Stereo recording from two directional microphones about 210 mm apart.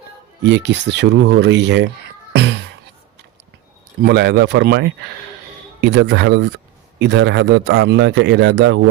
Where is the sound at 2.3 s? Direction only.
55° right (ahead or behind).